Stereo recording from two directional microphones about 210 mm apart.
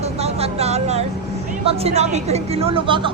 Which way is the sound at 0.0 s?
30° right (ahead or behind).